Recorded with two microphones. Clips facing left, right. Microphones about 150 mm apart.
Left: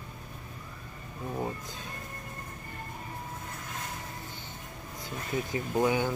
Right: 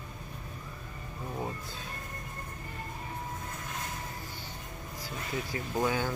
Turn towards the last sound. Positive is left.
turn(degrees=15)  # may be behind; listen again after turning